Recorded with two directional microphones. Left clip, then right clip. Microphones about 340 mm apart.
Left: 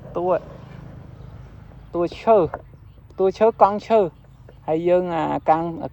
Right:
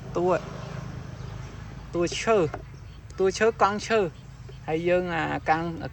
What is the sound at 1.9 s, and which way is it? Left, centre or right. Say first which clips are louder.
Speech: left 6 dB; centre.